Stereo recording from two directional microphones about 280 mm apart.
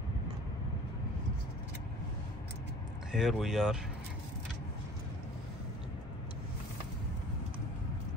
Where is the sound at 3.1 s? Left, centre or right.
Centre.